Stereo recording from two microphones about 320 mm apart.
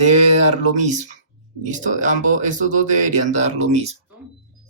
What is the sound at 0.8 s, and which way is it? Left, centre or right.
Speech, right.